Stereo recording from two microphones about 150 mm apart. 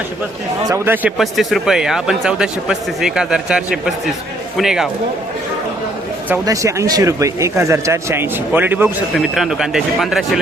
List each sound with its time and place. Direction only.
0.7 s speech: 15° right (ahead or behind)
1.2 s speech: centre (ahead or behind)
6.4 s speech: 20° right (ahead or behind)
9.1 s speech: centre (ahead or behind)